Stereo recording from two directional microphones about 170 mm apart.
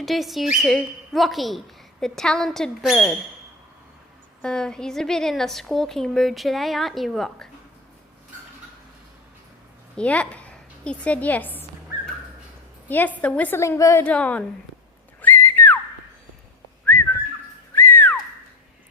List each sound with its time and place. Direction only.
0.0 s a woman's voice: centre (ahead or behind)
4.4 s a woman's voice: 5° left (ahead or behind)
10.0 s a woman's voice: 5° left (ahead or behind)
12.9 s a woman's voice: 10° left (ahead or behind)
15.2 s whistling: 10° left (ahead or behind)
17.7 s whistling: 10° left (ahead or behind)